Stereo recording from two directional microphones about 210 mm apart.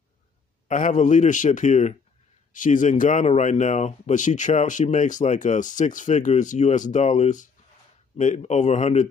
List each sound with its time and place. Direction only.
0.7 s speech: 35° left (ahead or behind)